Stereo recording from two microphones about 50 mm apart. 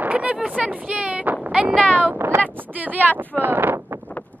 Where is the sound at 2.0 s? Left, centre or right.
Right.